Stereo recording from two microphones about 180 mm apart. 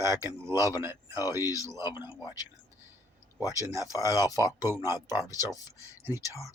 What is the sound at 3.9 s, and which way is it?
Speech, 20° left (ahead or behind).